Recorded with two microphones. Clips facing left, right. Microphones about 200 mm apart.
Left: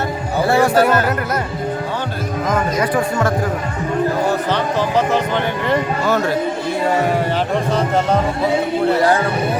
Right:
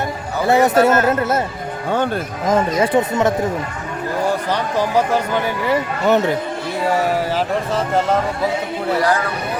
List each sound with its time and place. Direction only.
0.4 s a man's voice: 20° right (ahead or behind)
2.5 s speech: 25° right (ahead or behind)
4.5 s speech: 10° right (ahead or behind)
6.1 s speech: 20° right (ahead or behind)
7.7 s speech: centre (ahead or behind)
9.0 s speech: 25° left (ahead or behind)